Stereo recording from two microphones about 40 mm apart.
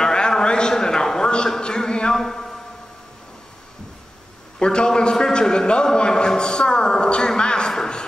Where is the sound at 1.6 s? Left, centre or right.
Left.